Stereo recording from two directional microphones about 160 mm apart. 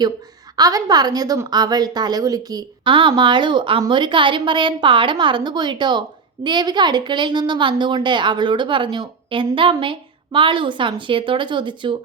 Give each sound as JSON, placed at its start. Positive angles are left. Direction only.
{"t": 0.5, "sound": "a woman's voice", "side_deg": -25}